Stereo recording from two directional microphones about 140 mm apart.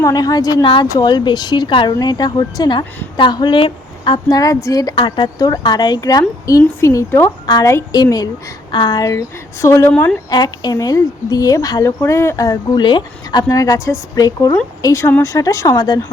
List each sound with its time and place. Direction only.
0.0 s speech: 25° left (ahead or behind)
10.2 s speech: 30° left (ahead or behind)